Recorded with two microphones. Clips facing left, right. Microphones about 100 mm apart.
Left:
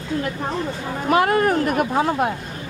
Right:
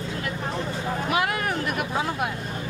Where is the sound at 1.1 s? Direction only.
40° left (ahead or behind).